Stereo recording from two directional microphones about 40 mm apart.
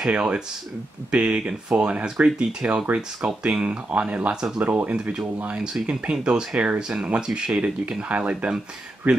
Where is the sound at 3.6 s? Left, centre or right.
Right.